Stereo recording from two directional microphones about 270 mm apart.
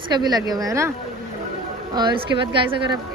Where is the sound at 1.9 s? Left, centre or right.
Centre.